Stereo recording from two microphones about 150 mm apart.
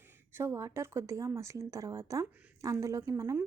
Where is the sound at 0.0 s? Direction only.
15° right (ahead or behind).